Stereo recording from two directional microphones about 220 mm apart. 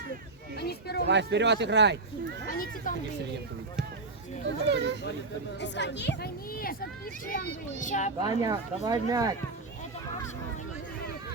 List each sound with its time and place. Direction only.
0.6 s speech: 45° left (ahead or behind)
1.0 s speech: 50° right (ahead or behind)
2.5 s speech: 40° left (ahead or behind)
4.4 s speech: 50° right (ahead or behind)
5.5 s speech: 50° left (ahead or behind)
7.8 s speech: 35° left (ahead or behind)
8.4 s speech: 15° right (ahead or behind)